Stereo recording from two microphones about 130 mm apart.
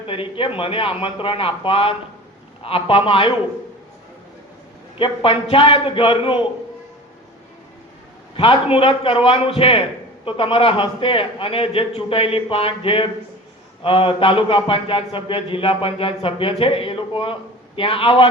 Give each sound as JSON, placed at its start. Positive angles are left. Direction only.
{"t": 0.1, "sound": "a man's voice", "side_deg": 40}
{"t": 4.9, "sound": "a man's voice", "side_deg": 45}
{"t": 8.4, "sound": "a man's voice", "side_deg": 45}